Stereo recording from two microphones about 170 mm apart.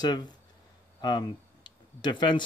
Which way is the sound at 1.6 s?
25° left (ahead or behind).